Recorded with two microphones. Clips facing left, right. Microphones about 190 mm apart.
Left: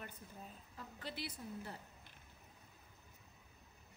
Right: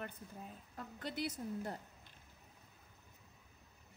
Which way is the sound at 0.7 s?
45° right (ahead or behind).